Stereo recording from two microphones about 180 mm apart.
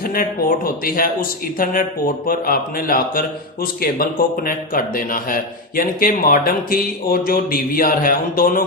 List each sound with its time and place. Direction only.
0.0 s speech: 55° left (ahead or behind)